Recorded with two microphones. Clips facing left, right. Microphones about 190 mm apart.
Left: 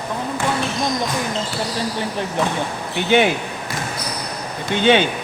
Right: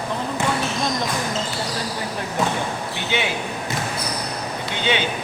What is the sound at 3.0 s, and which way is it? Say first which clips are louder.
Speech: left 10 dB; 55° left (ahead or behind).